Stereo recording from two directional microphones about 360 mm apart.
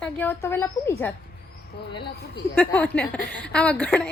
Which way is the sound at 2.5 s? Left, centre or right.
Centre.